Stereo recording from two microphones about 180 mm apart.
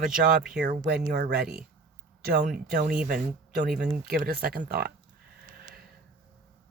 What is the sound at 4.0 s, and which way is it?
Speech, 55° right (ahead or behind).